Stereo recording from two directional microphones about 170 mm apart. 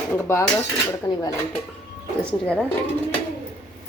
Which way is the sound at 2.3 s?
5° left (ahead or behind).